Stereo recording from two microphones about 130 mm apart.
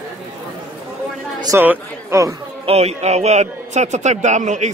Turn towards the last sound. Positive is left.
turn(degrees=-65)  # may be behind; listen again after turning